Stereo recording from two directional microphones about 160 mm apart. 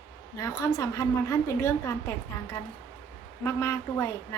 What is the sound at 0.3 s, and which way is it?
A woman's voice, 20° left (ahead or behind).